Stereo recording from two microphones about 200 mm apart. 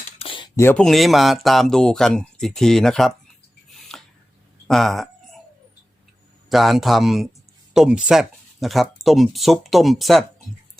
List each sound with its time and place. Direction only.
0.2 s speech: 25° left (ahead or behind); by 3.1 s centre (ahead or behind)
3.8 s a sound: centre (ahead or behind)
6.5 s speech: centre (ahead or behind)